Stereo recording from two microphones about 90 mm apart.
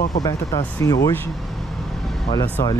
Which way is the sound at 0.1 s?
45° left (ahead or behind).